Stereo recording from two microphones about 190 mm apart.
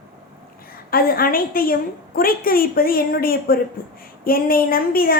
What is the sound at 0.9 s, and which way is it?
A woman's voice, 50° left (ahead or behind).